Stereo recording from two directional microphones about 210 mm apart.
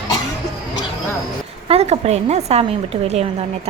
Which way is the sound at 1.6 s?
30° right (ahead or behind).